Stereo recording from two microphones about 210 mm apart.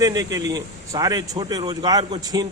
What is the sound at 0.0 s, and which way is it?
A man's voice, 15° right (ahead or behind).